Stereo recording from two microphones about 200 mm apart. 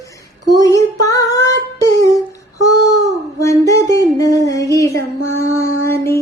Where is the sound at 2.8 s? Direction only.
15° left (ahead or behind).